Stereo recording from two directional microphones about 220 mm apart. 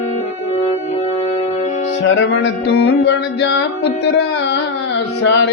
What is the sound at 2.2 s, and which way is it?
Music, 50° left (ahead or behind).